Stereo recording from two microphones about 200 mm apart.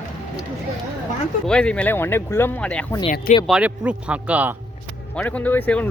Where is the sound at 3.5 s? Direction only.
5° right (ahead or behind).